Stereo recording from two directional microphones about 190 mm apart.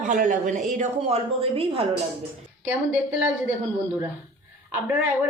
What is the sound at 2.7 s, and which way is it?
Speech, 10° right (ahead or behind).